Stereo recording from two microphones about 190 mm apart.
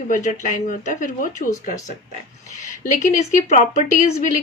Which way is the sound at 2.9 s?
40° left (ahead or behind).